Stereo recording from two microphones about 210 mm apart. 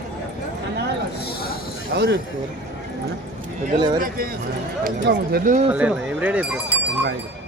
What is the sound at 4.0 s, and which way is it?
A man's voice, 45° right (ahead or behind).